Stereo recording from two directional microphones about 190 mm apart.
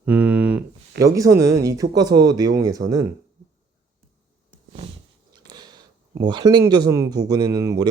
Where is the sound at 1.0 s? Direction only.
15° right (ahead or behind).